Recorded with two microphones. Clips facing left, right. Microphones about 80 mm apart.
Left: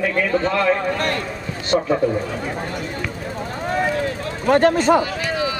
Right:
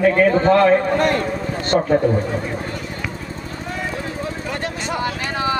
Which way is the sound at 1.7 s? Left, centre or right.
Centre.